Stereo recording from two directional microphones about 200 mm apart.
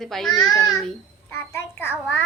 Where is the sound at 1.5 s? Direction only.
10° left (ahead or behind).